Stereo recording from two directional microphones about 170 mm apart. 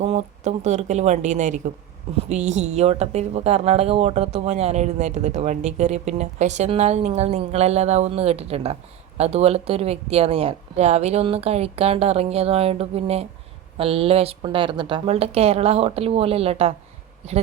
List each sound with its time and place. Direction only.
0.0 s a woman's voice: 40° right (ahead or behind)